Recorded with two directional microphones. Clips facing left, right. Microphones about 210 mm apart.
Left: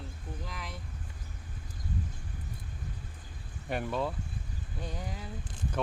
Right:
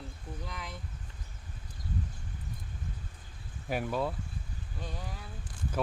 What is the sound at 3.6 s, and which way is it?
Speech, 5° right (ahead or behind).